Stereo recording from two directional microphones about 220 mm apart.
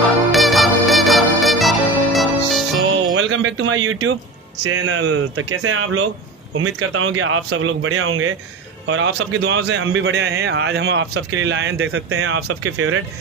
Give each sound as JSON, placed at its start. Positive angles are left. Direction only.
{"t": 0.3, "sound": "music", "side_deg": 0}
{"t": 3.2, "sound": "a man's voice", "side_deg": -60}
{"t": 8.8, "sound": "a man's voice", "side_deg": -55}
{"t": 12.4, "sound": "speech", "side_deg": -80}